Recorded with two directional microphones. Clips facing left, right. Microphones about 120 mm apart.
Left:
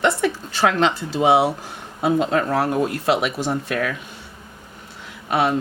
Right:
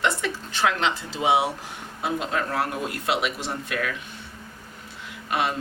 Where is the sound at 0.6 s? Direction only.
40° left (ahead or behind).